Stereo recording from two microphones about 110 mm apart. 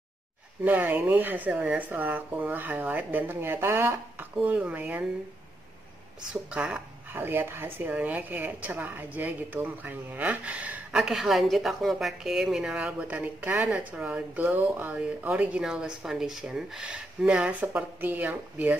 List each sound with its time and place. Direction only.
0.7 s speech: 15° right (ahead or behind)
4.4 s speech: 10° right (ahead or behind)
6.5 s speech: 10° right (ahead or behind)